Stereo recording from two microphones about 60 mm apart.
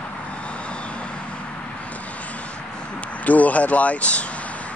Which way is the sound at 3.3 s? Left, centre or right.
Left.